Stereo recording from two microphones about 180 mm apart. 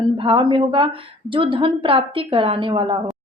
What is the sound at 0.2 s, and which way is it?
A woman's voice, 30° right (ahead or behind).